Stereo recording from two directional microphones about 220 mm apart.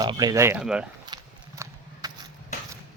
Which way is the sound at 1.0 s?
20° right (ahead or behind).